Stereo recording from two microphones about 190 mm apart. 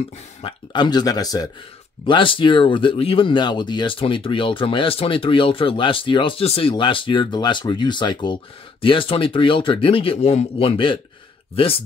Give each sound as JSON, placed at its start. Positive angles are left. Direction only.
{"t": 0.4, "sound": "speech", "side_deg": 25}